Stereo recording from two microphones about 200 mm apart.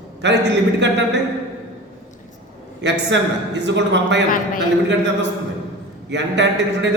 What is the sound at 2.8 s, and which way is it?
A man's voice, 60° right (ahead or behind).